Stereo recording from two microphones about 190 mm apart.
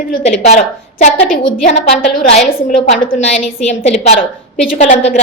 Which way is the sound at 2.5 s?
50° left (ahead or behind).